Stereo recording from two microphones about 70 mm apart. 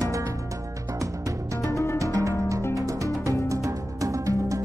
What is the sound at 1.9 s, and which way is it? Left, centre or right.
Music, right.